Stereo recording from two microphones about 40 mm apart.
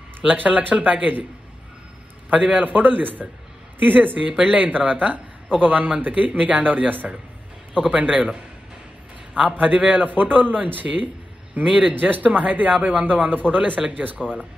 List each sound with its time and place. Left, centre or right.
0.2 s speech: right
2.2 s speech: right
4.3 s speech: right
4.6 s speech: right
8.1 s speech: right
9.3 s speech: right
11.9 s speech: right
13.7 s speech: right